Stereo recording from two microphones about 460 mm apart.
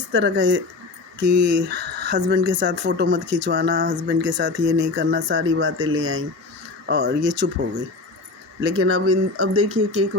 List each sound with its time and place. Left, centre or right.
0.1 s speech: right
8.6 s speech: right